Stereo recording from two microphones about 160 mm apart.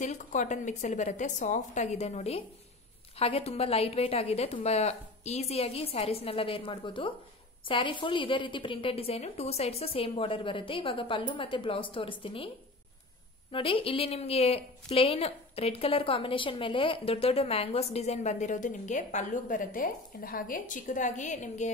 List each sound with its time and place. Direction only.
0.0 s a woman's voice: 50° left (ahead or behind)
13.5 s a woman's voice: 35° left (ahead or behind); by 21.6 s 50° left (ahead or behind)